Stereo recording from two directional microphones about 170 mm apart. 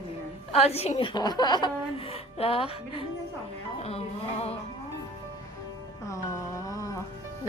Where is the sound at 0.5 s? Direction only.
35° left (ahead or behind).